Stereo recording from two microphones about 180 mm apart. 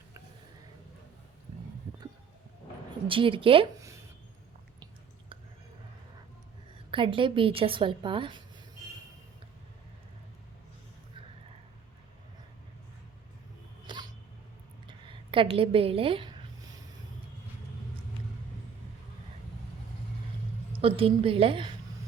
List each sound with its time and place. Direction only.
3.1 s a woman's voice: 30° right (ahead or behind)
6.9 s a woman's voice: 30° right (ahead or behind)
13.8 s a sound: 25° right (ahead or behind)
20.7 s a woman's voice: 30° right (ahead or behind)